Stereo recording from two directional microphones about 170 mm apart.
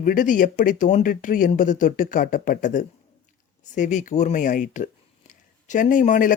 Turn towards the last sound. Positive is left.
turn(degrees=50)  # may be behind; listen again after turning